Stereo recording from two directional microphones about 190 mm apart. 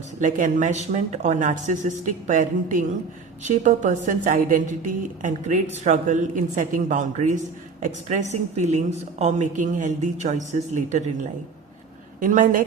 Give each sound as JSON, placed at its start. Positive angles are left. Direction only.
{"t": 0.2, "sound": "a woman's voice", "side_deg": -40}
{"t": 5.7, "sound": "a woman's voice", "side_deg": -40}